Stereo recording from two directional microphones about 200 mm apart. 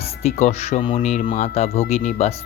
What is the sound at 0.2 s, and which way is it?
Speech, 35° left (ahead or behind).